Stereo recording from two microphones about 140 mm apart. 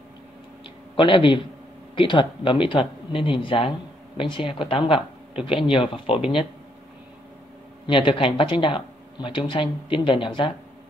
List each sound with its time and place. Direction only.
0.9 s speech: 35° left (ahead or behind)
7.8 s speech: 35° left (ahead or behind)